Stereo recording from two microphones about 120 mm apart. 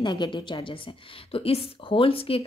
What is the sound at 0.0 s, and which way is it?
A woman's voice, 40° left (ahead or behind).